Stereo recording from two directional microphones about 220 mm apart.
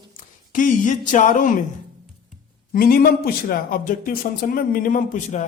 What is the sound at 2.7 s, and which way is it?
A man's voice, 40° left (ahead or behind).